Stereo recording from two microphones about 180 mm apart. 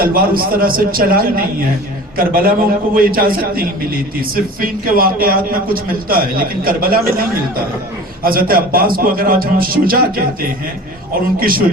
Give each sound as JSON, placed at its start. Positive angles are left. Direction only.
{"t": 0.0, "sound": "a man's voice", "side_deg": -55}
{"t": 11.1, "sound": "a man's voice", "side_deg": -55}